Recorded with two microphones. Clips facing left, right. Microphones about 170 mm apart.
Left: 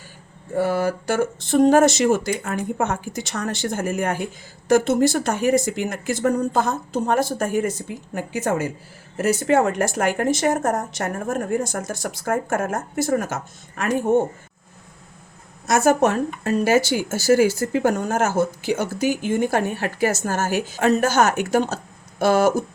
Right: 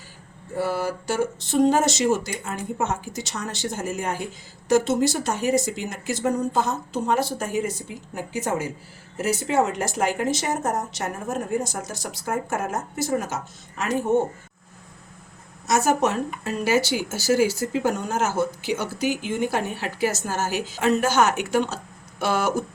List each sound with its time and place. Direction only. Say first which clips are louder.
0.5 s a woman's voice: left 4 dB; 50° left (ahead or behind)
15.6 s a woman's voice: left 4 dB; 55° left (ahead or behind)